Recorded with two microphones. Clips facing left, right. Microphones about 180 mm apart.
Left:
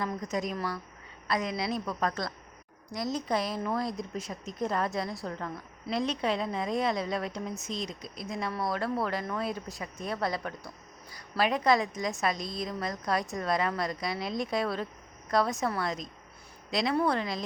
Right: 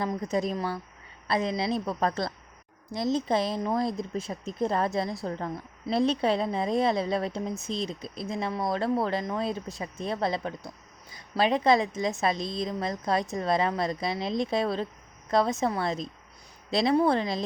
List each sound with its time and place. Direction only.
0.2 s a woman's voice: 30° right (ahead or behind)